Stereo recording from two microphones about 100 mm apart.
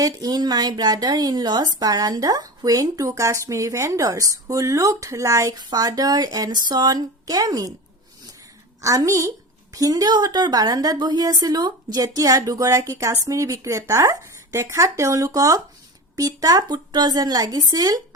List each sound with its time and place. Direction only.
0.0 s a woman's voice: 40° right (ahead or behind)
8.8 s a woman's voice: 35° right (ahead or behind)